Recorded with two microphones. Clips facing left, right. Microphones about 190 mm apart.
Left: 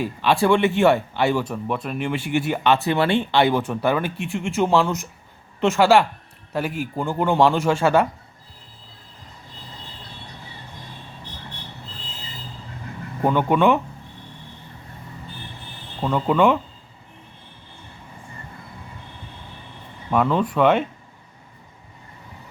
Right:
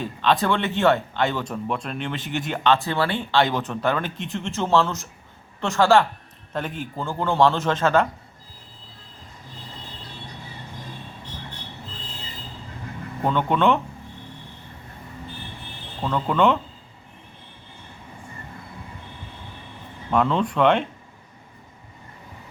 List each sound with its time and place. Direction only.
0.0 s speech: 10° left (ahead or behind)
3.4 s speech: 10° left (ahead or behind)
13.2 s speech: 10° left (ahead or behind)
16.0 s speech: 10° left (ahead or behind)
20.1 s speech: 5° left (ahead or behind)